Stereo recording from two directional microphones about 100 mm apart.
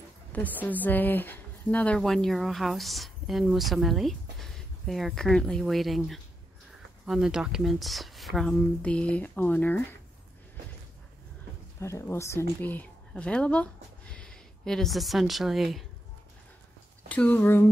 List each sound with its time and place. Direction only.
0.3 s a woman's voice: 15° left (ahead or behind)
2.0 s speech: 5° left (ahead or behind)
11.8 s a woman's voice: 30° left (ahead or behind); by 15.8 s centre (ahead or behind)
17.1 s speech: 15° left (ahead or behind)